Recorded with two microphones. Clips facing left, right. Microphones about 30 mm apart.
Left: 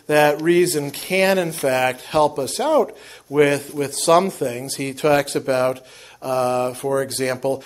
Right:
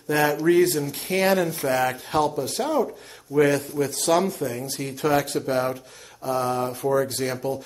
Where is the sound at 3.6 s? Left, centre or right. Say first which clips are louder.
Left 1 dB; left.